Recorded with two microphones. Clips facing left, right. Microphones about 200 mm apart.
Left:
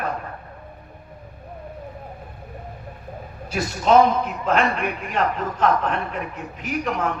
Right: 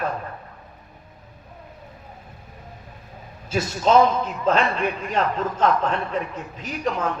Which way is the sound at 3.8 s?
30° right (ahead or behind).